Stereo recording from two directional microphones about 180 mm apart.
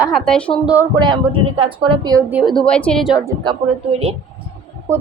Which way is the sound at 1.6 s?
25° right (ahead or behind).